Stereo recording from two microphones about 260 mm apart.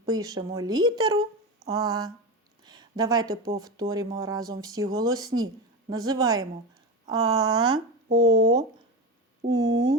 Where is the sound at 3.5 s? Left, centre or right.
Centre.